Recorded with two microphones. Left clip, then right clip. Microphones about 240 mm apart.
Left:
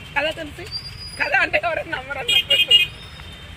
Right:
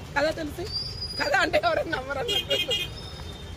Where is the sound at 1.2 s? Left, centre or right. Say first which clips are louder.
Left 4 dB; centre.